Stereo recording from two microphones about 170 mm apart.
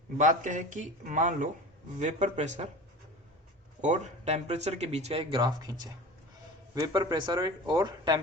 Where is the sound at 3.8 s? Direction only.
40° right (ahead or behind).